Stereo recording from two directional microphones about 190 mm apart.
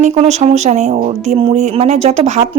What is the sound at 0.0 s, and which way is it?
A woman's voice, 35° right (ahead or behind).